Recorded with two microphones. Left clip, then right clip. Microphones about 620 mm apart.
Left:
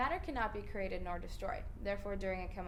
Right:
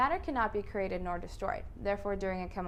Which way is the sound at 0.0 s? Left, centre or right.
Right.